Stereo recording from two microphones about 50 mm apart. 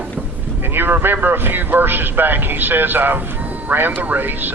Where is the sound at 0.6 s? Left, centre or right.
Right.